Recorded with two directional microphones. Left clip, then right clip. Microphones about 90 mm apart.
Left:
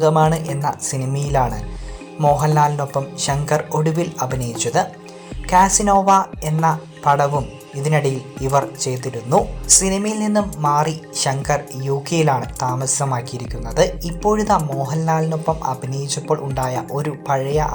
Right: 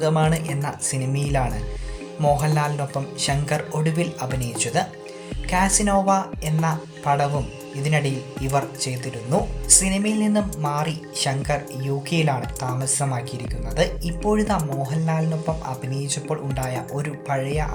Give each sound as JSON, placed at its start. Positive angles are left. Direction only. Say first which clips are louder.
{"t": 0.0, "sound": "speech", "louder": "left 6 dB", "side_deg": 30}
{"t": 7.8, "sound": "speech", "louder": "left 5 dB", "side_deg": 35}